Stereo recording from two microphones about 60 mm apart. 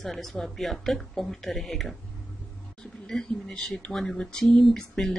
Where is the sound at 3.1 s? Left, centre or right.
Centre.